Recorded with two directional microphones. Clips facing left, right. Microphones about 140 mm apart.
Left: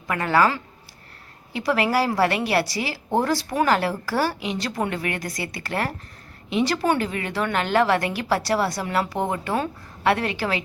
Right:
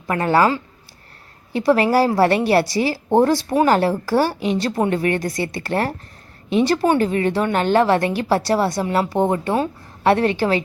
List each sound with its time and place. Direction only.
0.1 s a woman's voice: 30° right (ahead or behind)
7.0 s a woman's voice: 30° right (ahead or behind)